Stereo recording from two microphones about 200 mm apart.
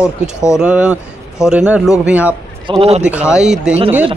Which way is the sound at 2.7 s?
30° right (ahead or behind).